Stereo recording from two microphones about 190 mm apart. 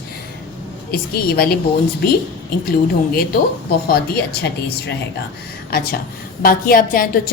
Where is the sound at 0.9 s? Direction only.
55° left (ahead or behind).